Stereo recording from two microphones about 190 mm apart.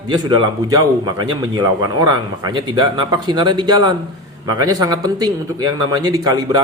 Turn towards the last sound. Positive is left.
turn(degrees=-20)  # may be behind; listen again after turning